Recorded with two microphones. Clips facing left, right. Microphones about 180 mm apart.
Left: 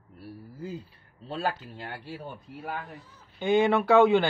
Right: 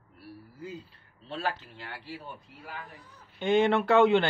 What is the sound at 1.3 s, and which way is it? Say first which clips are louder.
Speech: left 3 dB; 40° left (ahead or behind).